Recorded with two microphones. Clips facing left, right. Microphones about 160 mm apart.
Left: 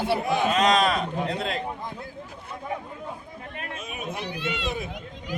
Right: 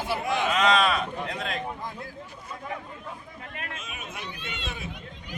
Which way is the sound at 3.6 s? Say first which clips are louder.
Left 9 dB; 35° left (ahead or behind).